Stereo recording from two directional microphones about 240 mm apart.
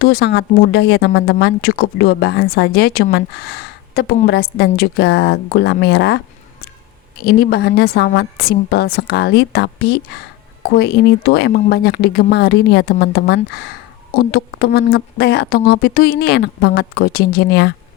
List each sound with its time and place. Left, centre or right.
0.0 s speech: left
7.3 s a woman's voice: left